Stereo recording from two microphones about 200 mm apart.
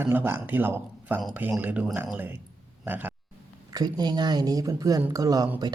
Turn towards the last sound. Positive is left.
turn(degrees=-20)  # may be behind; listen again after turning